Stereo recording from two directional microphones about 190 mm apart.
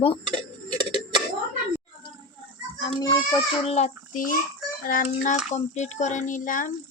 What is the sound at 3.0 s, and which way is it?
Speech, 20° left (ahead or behind).